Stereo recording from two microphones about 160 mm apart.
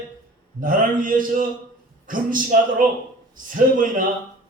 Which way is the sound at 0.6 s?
60° right (ahead or behind).